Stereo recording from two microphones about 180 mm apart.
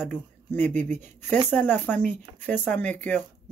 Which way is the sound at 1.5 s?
10° left (ahead or behind).